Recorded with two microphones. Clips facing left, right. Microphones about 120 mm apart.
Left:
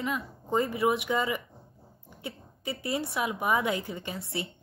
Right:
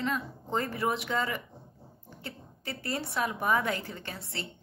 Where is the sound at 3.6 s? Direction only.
15° left (ahead or behind).